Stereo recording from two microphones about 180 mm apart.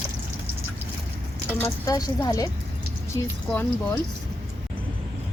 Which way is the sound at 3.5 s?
10° left (ahead or behind).